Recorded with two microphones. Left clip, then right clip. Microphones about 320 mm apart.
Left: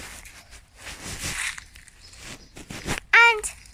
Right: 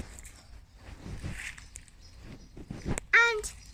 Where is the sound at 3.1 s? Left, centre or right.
Centre.